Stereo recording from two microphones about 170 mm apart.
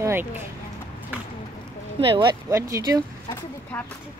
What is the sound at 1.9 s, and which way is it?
Speech, 30° right (ahead or behind).